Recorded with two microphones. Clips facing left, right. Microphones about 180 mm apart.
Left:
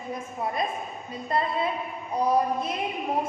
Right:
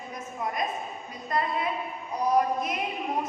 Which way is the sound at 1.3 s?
30° left (ahead or behind).